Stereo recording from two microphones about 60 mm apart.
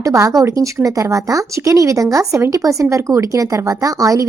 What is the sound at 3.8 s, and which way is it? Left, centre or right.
Speech, right.